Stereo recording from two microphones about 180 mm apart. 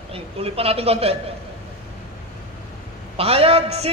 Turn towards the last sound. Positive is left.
turn(degrees=-35)  # may be behind; listen again after turning